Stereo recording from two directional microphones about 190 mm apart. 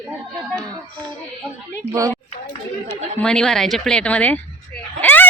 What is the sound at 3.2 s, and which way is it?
Speech, 5° left (ahead or behind).